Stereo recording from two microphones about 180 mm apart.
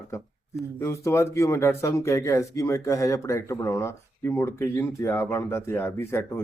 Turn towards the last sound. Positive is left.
turn(degrees=15)  # may be behind; listen again after turning